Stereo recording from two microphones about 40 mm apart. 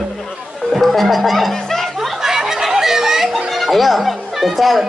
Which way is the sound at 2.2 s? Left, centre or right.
Centre.